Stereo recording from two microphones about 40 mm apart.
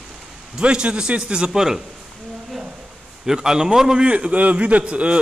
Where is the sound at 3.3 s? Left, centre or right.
Centre.